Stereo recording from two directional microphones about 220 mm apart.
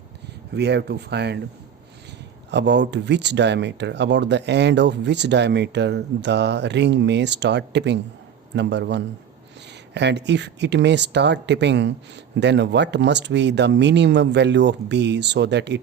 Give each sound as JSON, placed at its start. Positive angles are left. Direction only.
{"t": 0.5, "sound": "speech", "side_deg": -50}
{"t": 2.5, "sound": "speech", "side_deg": -50}